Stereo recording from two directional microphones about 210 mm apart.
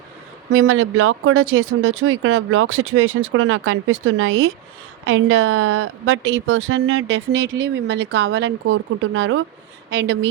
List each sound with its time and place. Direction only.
0.5 s a woman's voice: 70° right (ahead or behind)